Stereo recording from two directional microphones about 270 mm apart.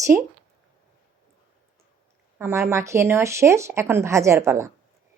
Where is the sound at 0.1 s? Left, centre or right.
Centre.